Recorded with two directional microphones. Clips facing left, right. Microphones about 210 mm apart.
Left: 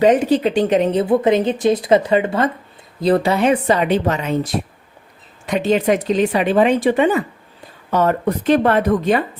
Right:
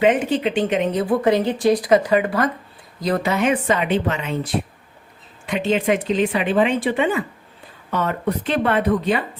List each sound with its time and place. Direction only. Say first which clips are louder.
0.0 s speech: left 4 dB; 40° left (ahead or behind)